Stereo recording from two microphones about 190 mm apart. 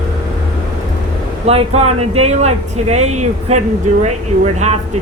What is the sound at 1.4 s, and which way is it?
Speech, 35° right (ahead or behind).